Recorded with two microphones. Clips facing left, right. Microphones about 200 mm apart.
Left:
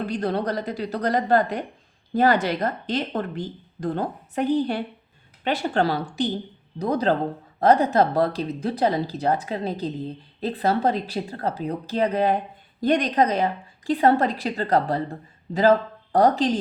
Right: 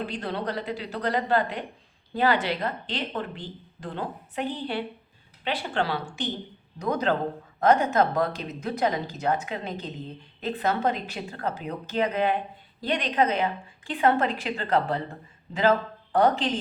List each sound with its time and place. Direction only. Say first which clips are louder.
0.0 s speech: left 6 dB; 40° left (ahead or behind)
16.1 s speech: left 4 dB; 35° left (ahead or behind)